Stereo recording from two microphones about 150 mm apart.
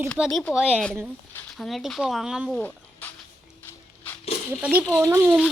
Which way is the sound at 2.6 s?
10° left (ahead or behind).